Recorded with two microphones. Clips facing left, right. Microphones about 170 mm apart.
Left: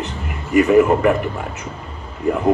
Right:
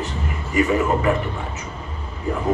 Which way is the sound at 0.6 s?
60° left (ahead or behind).